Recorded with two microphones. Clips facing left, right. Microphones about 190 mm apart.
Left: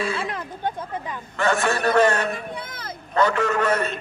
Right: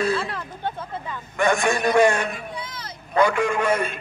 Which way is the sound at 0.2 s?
15° left (ahead or behind).